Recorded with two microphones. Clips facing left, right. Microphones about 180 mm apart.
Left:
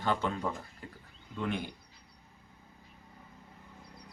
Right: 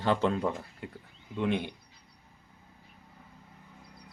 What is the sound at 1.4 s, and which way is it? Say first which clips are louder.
Speech: right 5 dB; 20° right (ahead or behind).